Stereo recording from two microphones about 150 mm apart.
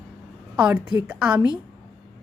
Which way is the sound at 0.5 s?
10° right (ahead or behind).